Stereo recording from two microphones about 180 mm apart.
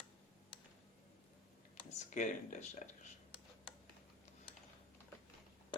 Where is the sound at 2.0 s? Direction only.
45° left (ahead or behind).